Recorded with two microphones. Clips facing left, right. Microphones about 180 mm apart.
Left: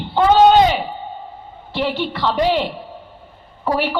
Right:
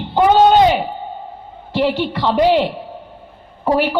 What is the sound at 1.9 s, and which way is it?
Speech, 40° right (ahead or behind).